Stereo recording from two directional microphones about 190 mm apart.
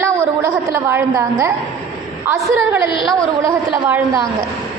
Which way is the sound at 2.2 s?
15° right (ahead or behind).